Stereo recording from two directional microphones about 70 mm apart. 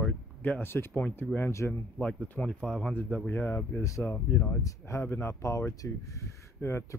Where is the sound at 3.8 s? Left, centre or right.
Left.